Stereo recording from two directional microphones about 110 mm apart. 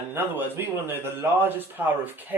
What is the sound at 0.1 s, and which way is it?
Speech, 20° right (ahead or behind).